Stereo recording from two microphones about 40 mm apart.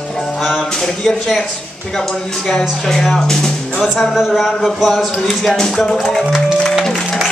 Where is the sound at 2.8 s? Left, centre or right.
Centre.